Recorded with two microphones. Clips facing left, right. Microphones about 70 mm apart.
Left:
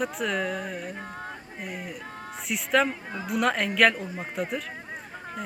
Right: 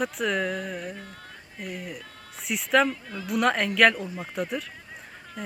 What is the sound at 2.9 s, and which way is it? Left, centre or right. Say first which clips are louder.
Speech: left 1 dB; left.